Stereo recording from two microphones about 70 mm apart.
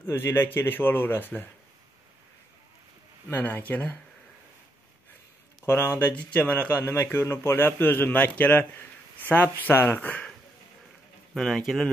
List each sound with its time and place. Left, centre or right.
0.0 s speech: left
3.3 s a man's voice: left
5.7 s speech: left
6.1 s a man's voice: left
11.3 s speech: centre